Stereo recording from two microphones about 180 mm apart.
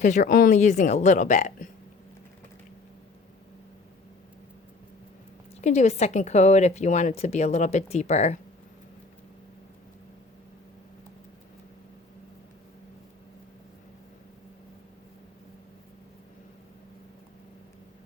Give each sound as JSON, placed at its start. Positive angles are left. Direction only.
{"t": 0.0, "sound": "a woman's voice", "side_deg": 45}
{"t": 5.5, "sound": "speech", "side_deg": 40}